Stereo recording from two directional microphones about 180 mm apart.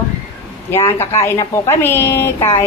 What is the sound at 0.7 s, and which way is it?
A woman's voice, 15° left (ahead or behind).